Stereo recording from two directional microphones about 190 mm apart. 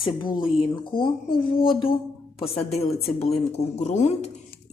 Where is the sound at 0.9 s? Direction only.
25° left (ahead or behind).